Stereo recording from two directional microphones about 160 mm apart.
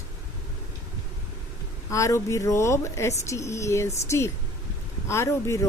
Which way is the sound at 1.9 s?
20° left (ahead or behind).